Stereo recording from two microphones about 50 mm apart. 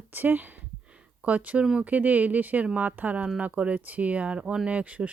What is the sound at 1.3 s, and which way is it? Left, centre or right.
Speech, right.